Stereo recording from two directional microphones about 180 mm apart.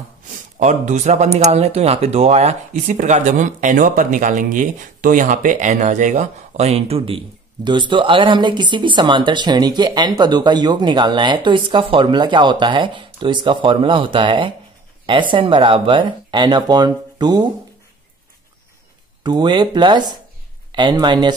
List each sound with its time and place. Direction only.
0.6 s speech: 40° right (ahead or behind); by 17.5 s 25° right (ahead or behind)
19.2 s speech: 25° right (ahead or behind)